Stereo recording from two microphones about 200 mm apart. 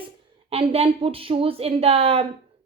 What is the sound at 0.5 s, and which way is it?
A woman's voice, 30° right (ahead or behind).